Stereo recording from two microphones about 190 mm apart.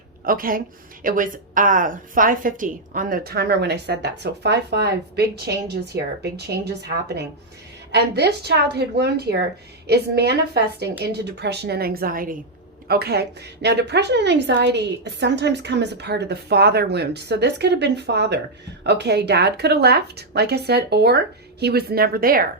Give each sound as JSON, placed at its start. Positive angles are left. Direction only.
{"t": 0.3, "sound": "a woman's voice", "side_deg": -50}